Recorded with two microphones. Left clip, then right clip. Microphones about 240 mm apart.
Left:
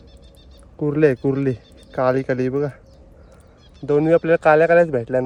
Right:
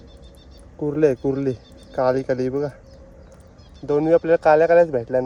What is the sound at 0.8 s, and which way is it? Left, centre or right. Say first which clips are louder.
Speech: left 2 dB; left.